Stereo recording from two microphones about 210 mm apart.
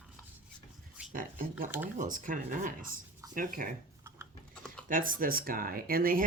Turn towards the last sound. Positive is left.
turn(degrees=-45)  # may be behind; listen again after turning